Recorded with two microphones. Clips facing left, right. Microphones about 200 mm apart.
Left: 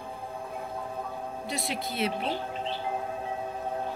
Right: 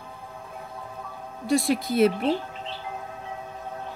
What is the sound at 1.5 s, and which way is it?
Speech, 50° right (ahead or behind).